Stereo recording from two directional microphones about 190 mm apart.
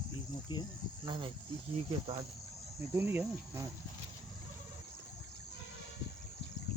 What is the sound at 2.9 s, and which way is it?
Speech, 10° right (ahead or behind).